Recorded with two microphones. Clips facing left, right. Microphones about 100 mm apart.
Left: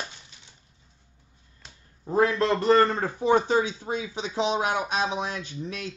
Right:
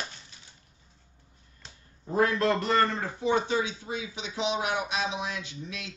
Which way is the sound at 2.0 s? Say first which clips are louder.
Left 2 dB; 30° left (ahead or behind).